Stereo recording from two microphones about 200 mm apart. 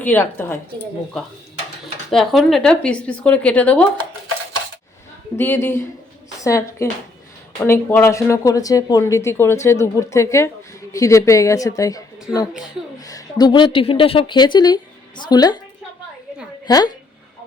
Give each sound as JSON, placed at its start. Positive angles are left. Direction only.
{"t": 0.0, "sound": "speech", "side_deg": 10}
{"t": 2.0, "sound": "speech", "side_deg": 0}
{"t": 5.4, "sound": "speech", "side_deg": 10}
{"t": 13.1, "sound": "speech", "side_deg": 20}
{"t": 16.6, "sound": "speech", "side_deg": 20}